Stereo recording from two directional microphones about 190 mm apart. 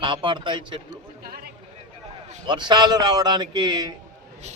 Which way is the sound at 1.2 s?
55° right (ahead or behind).